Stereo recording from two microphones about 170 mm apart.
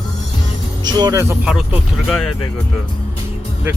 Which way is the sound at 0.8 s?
25° right (ahead or behind).